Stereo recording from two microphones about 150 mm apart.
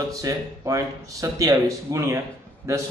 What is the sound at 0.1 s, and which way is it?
A man's voice, 25° right (ahead or behind).